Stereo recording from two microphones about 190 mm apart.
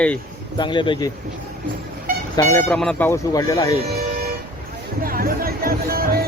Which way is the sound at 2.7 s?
5° left (ahead or behind).